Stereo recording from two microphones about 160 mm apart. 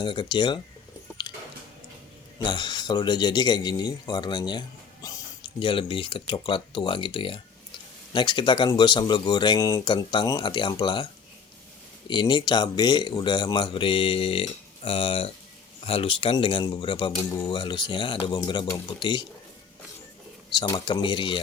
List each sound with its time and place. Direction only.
0.0 s speech: 30° left (ahead or behind)
1.2 s music: 25° left (ahead or behind)
2.4 s speech: 30° left (ahead or behind)
12.0 s speech: 30° left (ahead or behind)
20.5 s speech: 30° left (ahead or behind)